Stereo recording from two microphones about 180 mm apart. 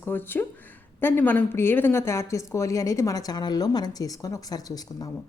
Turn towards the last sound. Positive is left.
turn(degrees=20)  # may be behind; listen again after turning